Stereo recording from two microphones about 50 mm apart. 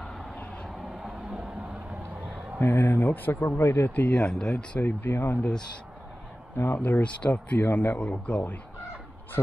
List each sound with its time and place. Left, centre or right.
0.7 s vehicle: centre
1.3 s a sound: right
2.6 s speech: left
3.3 s speech: left
3.9 s speech: left
4.7 s speech: left
5.1 s speech: left
6.5 s speech: left
6.8 s speech: left